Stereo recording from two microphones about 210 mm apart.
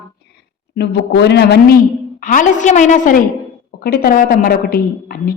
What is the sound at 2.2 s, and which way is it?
A woman's voice, 40° left (ahead or behind).